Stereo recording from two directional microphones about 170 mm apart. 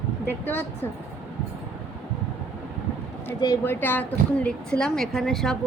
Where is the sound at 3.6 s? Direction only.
10° left (ahead or behind).